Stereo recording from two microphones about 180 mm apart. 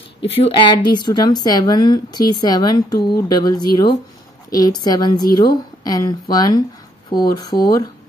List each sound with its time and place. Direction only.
0.2 s a woman's voice: 30° left (ahead or behind)